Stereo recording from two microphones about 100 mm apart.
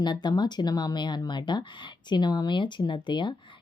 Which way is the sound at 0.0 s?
45° left (ahead or behind).